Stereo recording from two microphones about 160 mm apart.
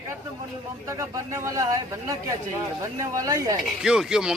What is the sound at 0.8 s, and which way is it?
Speech, 20° right (ahead or behind).